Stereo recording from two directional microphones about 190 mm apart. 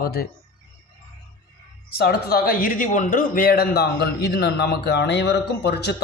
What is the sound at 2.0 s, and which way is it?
A man's voice, 55° left (ahead or behind).